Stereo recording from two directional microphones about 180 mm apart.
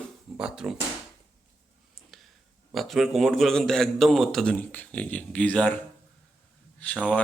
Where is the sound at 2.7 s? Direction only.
Centre (ahead or behind).